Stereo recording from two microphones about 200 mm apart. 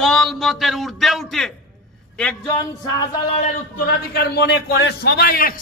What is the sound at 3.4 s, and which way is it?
A man's voice, 45° left (ahead or behind).